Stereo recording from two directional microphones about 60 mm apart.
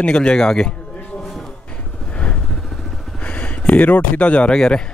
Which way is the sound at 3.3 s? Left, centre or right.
Left.